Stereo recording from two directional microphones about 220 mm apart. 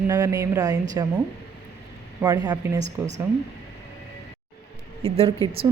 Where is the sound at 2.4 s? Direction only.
15° right (ahead or behind).